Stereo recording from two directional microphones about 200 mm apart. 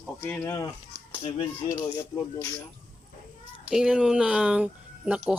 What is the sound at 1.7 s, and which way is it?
Speech, 15° left (ahead or behind).